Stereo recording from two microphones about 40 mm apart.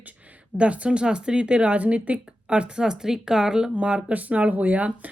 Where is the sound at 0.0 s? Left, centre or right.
Right; by 3.7 s centre.